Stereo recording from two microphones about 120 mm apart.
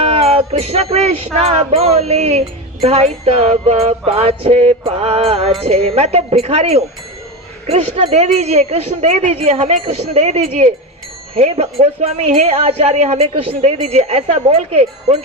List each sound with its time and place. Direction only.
0.0 s music: 60° right (ahead or behind)
1.5 s speech: 55° right (ahead or behind)
13.7 s speech: 60° right (ahead or behind)